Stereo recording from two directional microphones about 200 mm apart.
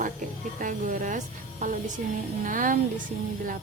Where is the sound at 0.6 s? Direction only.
40° right (ahead or behind).